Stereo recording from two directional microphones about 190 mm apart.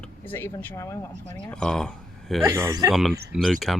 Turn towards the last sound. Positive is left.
turn(degrees=0)  # may be behind; listen again after turning